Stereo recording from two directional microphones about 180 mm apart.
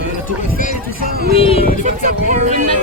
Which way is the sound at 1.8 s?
50° right (ahead or behind).